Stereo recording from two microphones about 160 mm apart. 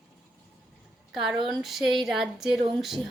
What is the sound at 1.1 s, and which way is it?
A woman's voice, 5° right (ahead or behind).